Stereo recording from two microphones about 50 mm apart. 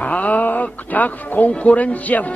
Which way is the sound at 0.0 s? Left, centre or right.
Left.